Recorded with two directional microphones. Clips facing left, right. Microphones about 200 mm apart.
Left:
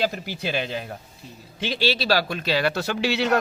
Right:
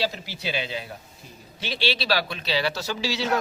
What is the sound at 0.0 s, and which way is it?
Speech, 50° left (ahead or behind).